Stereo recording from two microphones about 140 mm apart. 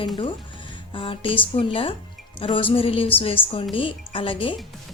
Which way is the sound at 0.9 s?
40° left (ahead or behind).